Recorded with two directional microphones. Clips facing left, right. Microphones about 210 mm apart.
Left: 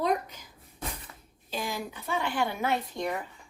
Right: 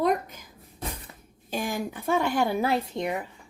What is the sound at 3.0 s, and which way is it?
Speech, 15° right (ahead or behind).